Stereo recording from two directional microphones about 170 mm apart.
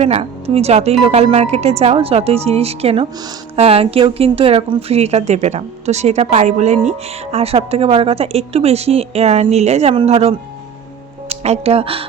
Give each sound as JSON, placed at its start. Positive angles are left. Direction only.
{"t": 0.0, "sound": "a woman's voice", "side_deg": -35}